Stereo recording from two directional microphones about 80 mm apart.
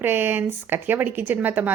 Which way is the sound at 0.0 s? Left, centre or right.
Right.